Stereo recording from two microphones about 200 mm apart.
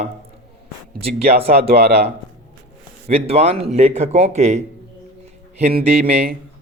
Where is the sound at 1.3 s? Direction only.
50° right (ahead or behind).